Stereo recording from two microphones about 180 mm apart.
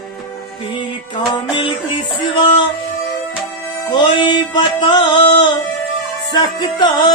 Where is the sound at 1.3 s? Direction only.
25° left (ahead or behind).